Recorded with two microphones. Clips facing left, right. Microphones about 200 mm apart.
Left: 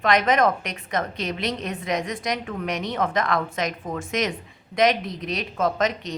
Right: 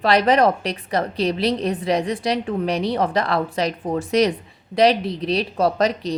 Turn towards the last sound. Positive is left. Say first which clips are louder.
# right 4 dB
turn(degrees=-35)  # may be behind; listen again after turning